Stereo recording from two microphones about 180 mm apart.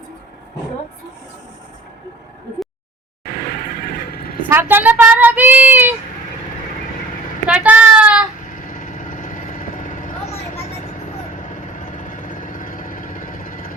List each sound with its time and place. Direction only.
4.5 s speech: 10° right (ahead or behind)
7.4 s child singing: 5° right (ahead or behind)
8.4 s vehicle: 45° left (ahead or behind)